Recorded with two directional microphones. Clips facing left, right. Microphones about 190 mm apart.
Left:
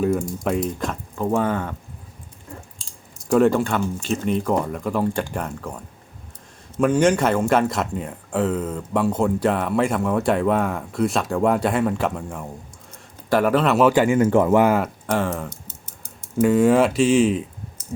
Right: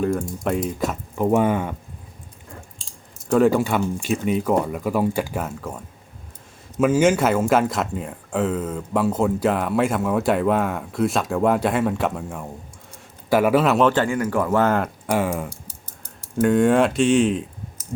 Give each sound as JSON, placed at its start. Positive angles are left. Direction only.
{"t": 0.0, "sound": "speech", "side_deg": 5}
{"t": 3.2, "sound": "speech", "side_deg": 0}
{"t": 13.7, "sound": "speech", "side_deg": 10}
{"t": 14.2, "sound": "speech", "side_deg": 25}
{"t": 15.0, "sound": "speech", "side_deg": -10}
{"t": 16.4, "sound": "speech", "side_deg": 0}